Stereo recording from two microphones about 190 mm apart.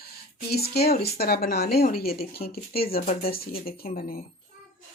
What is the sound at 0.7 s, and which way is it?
Speech, 55° left (ahead or behind).